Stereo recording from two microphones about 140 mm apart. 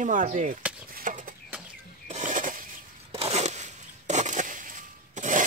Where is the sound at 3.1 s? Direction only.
45° right (ahead or behind); by 5.4 s 65° right (ahead or behind).